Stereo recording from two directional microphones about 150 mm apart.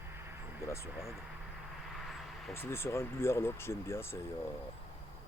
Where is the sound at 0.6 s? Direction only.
20° left (ahead or behind).